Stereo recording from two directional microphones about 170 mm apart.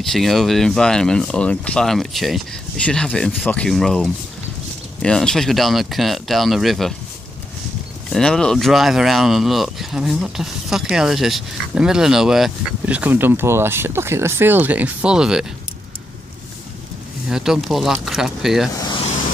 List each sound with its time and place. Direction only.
0.0 s speech: centre (ahead or behind)
8.1 s speech: 5° left (ahead or behind)
17.3 s speech: 5° right (ahead or behind)
18.8 s vehicle: 25° left (ahead or behind)